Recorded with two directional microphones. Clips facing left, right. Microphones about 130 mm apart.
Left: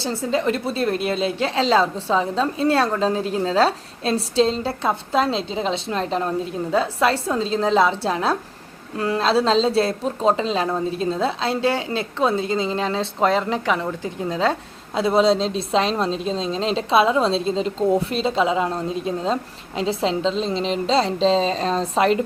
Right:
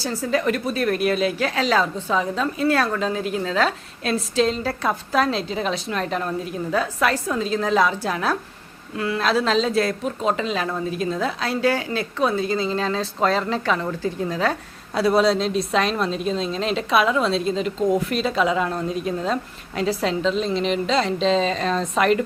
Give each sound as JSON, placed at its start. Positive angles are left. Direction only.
{"t": 0.0, "sound": "speech", "side_deg": 25}